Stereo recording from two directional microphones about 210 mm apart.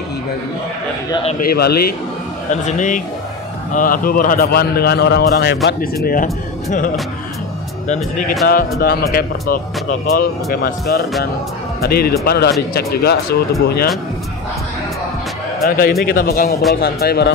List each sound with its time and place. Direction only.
1.4 s a man's voice: 45° left (ahead or behind)
2.5 s a man's voice: 35° left (ahead or behind)
8.5 s a man's voice: 45° left (ahead or behind)
15.6 s a man's voice: 45° left (ahead or behind)